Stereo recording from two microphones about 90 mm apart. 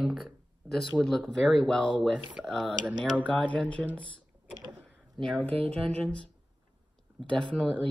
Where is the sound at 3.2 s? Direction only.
15° left (ahead or behind).